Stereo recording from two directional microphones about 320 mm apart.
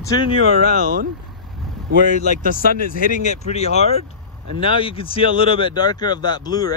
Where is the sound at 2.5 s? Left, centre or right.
Left.